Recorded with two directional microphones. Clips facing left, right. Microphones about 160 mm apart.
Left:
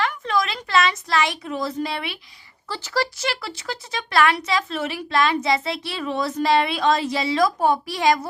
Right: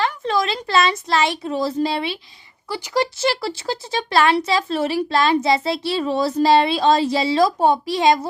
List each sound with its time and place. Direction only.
0.0 s a woman's voice: 30° right (ahead or behind)
2.6 s speech: 15° right (ahead or behind)
3.2 s speech: 30° right (ahead or behind)